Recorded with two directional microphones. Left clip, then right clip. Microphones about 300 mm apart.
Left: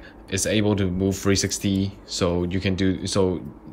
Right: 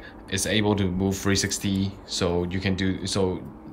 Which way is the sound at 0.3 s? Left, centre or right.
Centre.